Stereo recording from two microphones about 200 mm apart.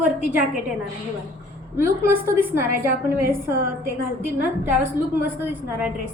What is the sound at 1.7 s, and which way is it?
Speech, 15° right (ahead or behind).